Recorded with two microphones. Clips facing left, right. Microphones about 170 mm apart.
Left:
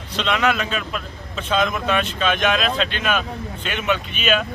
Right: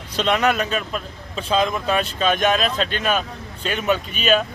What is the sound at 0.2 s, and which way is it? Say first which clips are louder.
Speech: right 2 dB; 45° right (ahead or behind).